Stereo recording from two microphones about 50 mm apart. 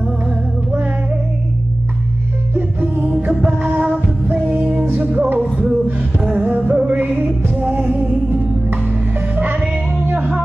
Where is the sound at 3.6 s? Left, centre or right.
Right.